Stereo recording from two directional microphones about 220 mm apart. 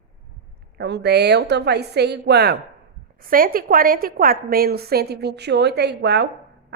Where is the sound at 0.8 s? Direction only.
50° right (ahead or behind).